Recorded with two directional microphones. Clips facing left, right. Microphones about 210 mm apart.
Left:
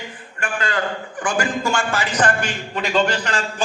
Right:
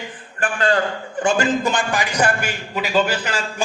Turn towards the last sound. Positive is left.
turn(degrees=-10)  # may be behind; listen again after turning